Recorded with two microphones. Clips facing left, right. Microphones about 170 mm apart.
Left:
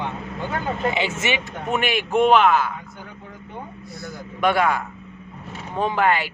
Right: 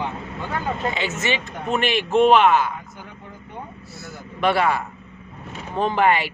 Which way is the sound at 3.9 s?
5° right (ahead or behind).